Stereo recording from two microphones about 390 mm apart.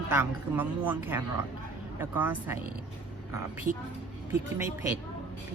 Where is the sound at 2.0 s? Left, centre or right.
Centre.